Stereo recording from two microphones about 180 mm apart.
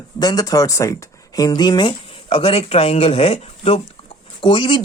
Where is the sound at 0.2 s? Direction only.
20° left (ahead or behind).